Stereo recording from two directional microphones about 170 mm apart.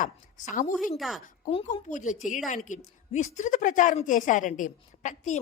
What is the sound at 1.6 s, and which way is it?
A woman's voice, 45° left (ahead or behind).